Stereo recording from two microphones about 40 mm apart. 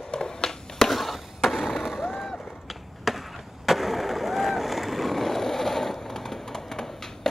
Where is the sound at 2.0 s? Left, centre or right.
Centre.